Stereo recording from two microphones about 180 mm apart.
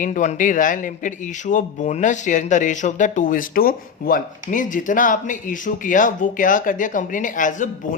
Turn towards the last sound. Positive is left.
turn(degrees=45)  # may be behind; listen again after turning